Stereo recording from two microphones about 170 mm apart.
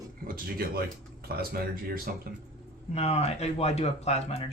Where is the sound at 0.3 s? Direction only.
65° right (ahead or behind).